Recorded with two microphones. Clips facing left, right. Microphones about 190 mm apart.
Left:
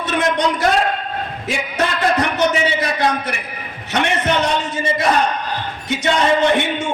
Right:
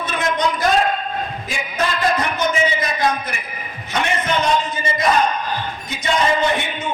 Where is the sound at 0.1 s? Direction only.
75° left (ahead or behind).